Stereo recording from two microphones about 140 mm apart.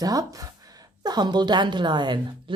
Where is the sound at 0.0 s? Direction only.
25° right (ahead or behind).